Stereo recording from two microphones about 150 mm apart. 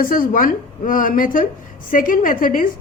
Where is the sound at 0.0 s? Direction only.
70° left (ahead or behind).